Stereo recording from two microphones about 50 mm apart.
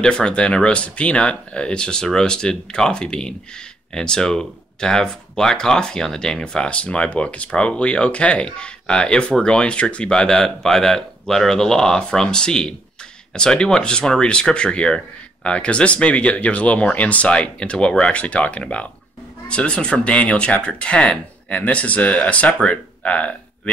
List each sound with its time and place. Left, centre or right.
0.0 s speech: centre